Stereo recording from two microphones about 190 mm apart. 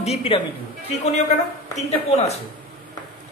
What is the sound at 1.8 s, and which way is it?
Speech, 35° left (ahead or behind).